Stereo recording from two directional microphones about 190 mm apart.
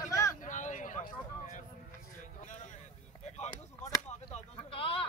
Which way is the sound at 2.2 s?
40° left (ahead or behind).